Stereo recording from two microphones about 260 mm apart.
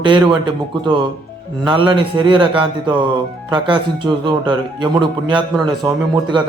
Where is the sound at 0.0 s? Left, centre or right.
Centre.